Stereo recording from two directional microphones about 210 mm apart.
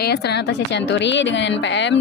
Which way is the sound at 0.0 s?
50° left (ahead or behind).